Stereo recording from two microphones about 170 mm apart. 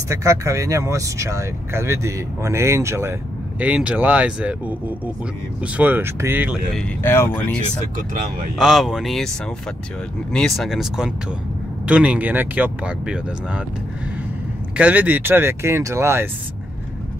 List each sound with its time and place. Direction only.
0.1 s speech: 20° right (ahead or behind)
6.7 s speech: 10° left (ahead or behind)
8.5 s speech: 5° right (ahead or behind)
10.3 s speech: centre (ahead or behind)
14.8 s speech: 10° right (ahead or behind)